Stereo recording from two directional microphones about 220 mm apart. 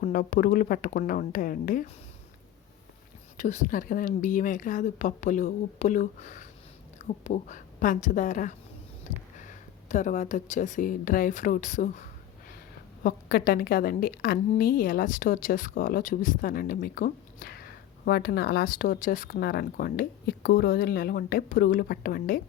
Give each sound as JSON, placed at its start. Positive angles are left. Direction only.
{"t": 0.0, "sound": "a woman's voice", "side_deg": 40}
{"t": 3.3, "sound": "a woman's voice", "side_deg": 35}